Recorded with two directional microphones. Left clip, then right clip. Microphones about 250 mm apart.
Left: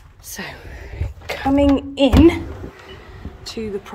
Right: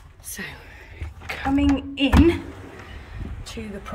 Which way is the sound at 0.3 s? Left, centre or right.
Centre.